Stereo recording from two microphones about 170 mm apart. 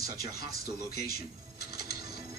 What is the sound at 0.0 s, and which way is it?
Speech, 65° left (ahead or behind).